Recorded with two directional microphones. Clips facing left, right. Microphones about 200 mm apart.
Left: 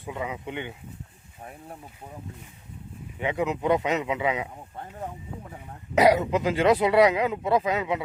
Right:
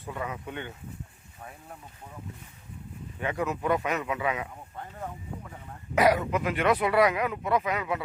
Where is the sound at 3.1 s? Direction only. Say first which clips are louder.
Left 3 dB; 20° left (ahead or behind).